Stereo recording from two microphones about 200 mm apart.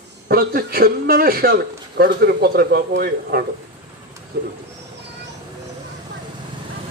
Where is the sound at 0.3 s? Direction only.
50° right (ahead or behind).